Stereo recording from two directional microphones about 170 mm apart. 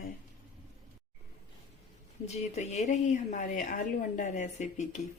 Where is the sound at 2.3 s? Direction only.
40° left (ahead or behind).